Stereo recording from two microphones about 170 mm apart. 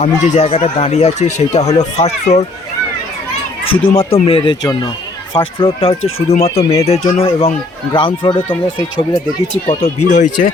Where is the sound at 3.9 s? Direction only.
35° left (ahead or behind).